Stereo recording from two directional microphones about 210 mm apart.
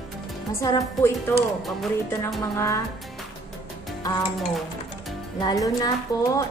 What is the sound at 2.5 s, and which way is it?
Speech, 15° left (ahead or behind).